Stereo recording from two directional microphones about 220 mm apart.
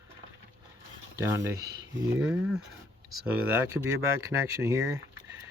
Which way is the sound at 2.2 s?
5° right (ahead or behind).